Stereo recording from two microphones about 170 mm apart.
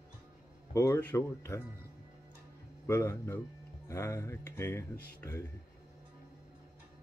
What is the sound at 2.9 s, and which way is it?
Speech, 15° left (ahead or behind).